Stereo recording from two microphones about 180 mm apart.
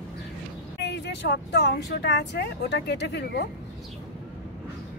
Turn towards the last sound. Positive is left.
turn(degrees=65)  # may be behind; listen again after turning